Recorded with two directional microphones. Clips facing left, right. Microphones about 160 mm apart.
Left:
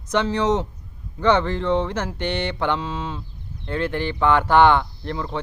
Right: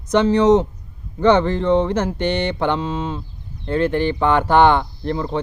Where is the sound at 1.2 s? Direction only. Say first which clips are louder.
Right 4 dB; 15° right (ahead or behind).